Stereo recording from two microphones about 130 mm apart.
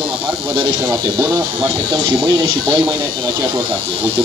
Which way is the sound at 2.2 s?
30° right (ahead or behind).